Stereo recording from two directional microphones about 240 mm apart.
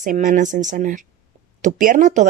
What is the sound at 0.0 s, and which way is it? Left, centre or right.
Speech, right.